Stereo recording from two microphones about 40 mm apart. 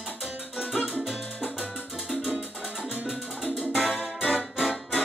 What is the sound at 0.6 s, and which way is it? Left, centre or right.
Music, right.